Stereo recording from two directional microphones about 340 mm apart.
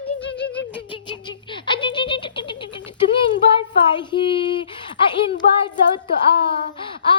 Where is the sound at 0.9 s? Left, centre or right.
Centre.